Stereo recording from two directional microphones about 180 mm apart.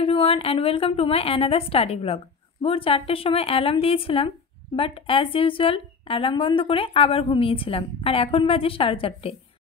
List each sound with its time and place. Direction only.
0.0 s a woman's voice: 30° left (ahead or behind)